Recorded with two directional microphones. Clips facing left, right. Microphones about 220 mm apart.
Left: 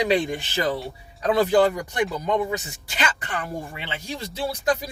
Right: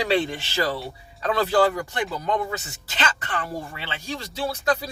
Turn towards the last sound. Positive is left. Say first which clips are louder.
# even
turn(degrees=20)  # may be behind; listen again after turning